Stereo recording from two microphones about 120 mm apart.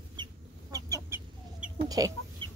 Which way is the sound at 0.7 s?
30° right (ahead or behind).